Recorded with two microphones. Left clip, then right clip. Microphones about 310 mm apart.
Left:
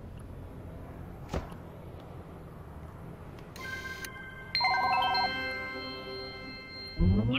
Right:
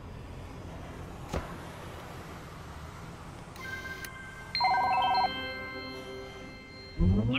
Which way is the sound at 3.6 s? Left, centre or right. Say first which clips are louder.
Left 1 dB; centre.